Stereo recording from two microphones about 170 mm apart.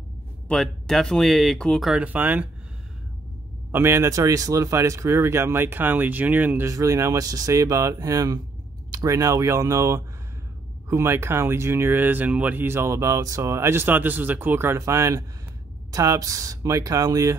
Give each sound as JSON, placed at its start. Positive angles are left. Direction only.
{"t": 0.5, "sound": "speech", "side_deg": 0}
{"t": 3.7, "sound": "speech", "side_deg": -15}